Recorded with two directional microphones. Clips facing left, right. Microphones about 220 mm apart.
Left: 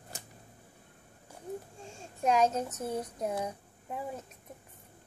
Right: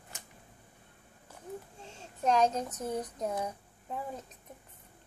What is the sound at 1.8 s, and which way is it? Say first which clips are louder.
Speech: even; 10° left (ahead or behind).